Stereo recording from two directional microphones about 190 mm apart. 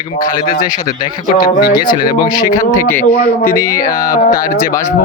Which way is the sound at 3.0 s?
45° left (ahead or behind).